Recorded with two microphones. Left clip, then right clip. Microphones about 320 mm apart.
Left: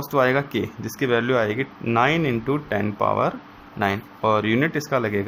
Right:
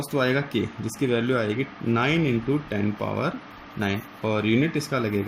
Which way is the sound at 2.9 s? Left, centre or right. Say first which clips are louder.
Left 8 dB; left.